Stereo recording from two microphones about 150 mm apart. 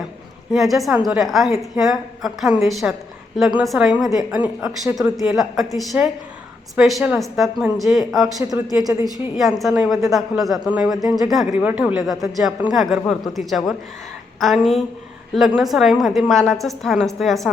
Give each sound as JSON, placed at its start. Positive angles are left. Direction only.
{"t": 0.5, "sound": "a woman's voice", "side_deg": 0}
{"t": 8.8, "sound": "a woman's voice", "side_deg": -20}
{"t": 9.1, "sound": "a woman's voice", "side_deg": 0}